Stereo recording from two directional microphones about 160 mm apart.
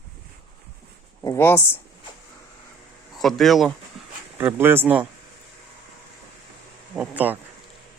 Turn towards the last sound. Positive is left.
turn(degrees=-5)  # may be behind; listen again after turning